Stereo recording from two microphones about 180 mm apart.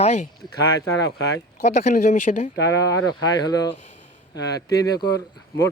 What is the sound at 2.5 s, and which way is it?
Speech, 80° left.